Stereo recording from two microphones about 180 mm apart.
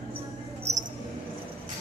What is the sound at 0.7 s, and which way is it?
Mouse, 40° right (ahead or behind).